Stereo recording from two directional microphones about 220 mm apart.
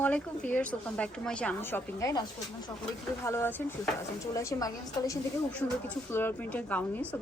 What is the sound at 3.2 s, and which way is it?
A woman's voice, 10° left (ahead or behind).